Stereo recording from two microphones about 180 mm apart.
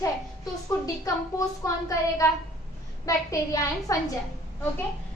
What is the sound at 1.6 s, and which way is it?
A woman's voice, 20° left (ahead or behind).